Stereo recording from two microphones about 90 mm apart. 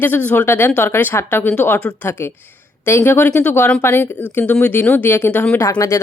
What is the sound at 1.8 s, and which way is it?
Speech, 10° left (ahead or behind).